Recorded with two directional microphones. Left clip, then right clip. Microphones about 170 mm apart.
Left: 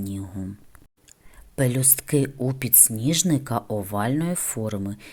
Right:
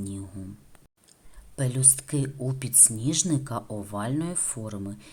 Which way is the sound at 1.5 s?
30° left (ahead or behind).